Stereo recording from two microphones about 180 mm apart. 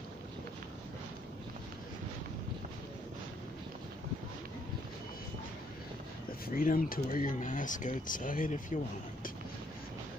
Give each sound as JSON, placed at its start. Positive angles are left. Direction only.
{"t": 6.4, "sound": "speech", "side_deg": 50}